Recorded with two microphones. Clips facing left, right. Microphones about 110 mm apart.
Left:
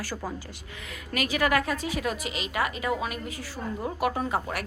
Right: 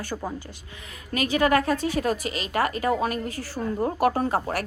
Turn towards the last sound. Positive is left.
turn(degrees=-35)  # may be behind; listen again after turning